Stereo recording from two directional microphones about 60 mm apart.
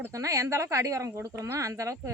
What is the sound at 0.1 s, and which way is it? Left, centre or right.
Speech, right.